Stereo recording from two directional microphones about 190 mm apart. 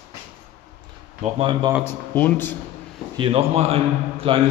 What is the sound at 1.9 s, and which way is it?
Speech, 10° left (ahead or behind).